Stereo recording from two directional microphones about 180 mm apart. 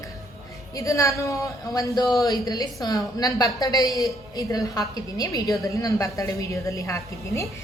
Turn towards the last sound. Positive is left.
turn(degrees=15)  # may be behind; listen again after turning